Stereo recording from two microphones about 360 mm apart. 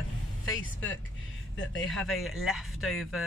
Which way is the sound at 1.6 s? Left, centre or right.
Left.